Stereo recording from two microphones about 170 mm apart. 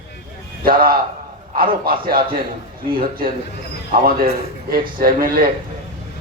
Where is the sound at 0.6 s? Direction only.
55° right (ahead or behind).